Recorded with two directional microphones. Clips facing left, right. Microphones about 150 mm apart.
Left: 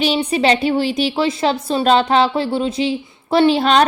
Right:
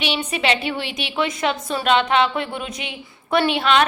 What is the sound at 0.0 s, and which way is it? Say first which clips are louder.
A woman's voice: left 7 dB; 35° left (ahead or behind).